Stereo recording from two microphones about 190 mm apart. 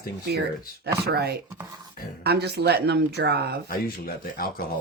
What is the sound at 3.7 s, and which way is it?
Speech, 50° left (ahead or behind).